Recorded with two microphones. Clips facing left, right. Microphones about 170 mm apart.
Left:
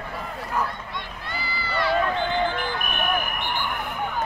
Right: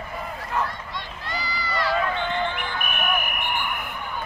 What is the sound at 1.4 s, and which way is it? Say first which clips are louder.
Run: left 2 dB; 30° left (ahead or behind).